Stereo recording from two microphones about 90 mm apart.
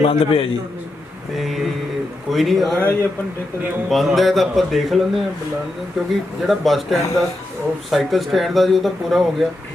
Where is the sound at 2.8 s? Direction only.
20° left (ahead or behind).